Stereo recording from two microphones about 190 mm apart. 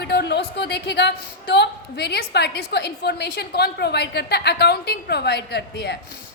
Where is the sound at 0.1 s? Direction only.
60° left (ahead or behind).